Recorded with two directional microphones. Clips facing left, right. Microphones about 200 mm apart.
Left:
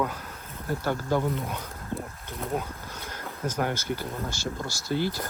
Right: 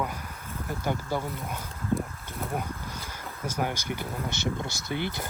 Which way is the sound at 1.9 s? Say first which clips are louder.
Right 5 dB; 10° right (ahead or behind).